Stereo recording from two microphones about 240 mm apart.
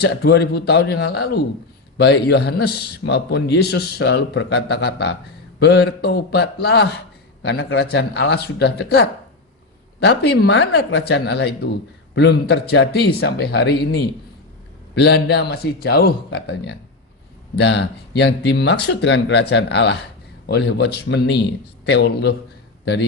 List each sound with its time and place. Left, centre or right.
0.0 s a man's voice: left